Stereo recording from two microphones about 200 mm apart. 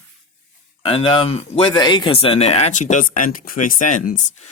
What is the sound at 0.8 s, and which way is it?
Speech, 25° left (ahead or behind).